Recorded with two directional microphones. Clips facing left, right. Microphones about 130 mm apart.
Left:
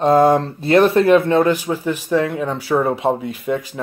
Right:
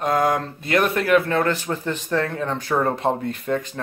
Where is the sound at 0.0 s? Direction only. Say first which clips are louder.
Left 7 dB; 30° left (ahead or behind).